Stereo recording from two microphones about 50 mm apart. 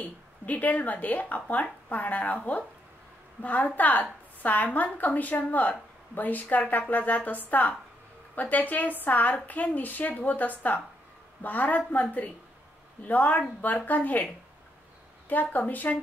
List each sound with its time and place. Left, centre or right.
0.0 s speech: left
8.4 s speech: left
15.2 s speech: left